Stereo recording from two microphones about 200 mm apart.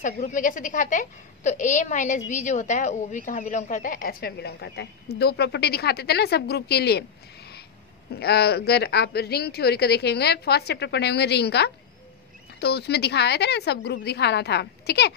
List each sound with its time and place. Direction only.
0.0 s a woman's voice: 40° left (ahead or behind)